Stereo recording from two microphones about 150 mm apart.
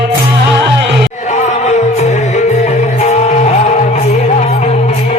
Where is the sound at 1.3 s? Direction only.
50° left (ahead or behind).